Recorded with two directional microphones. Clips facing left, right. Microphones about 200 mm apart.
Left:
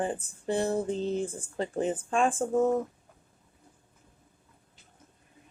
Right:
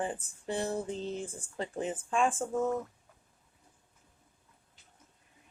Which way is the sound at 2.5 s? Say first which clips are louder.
Left 6 dB; 25° left (ahead or behind).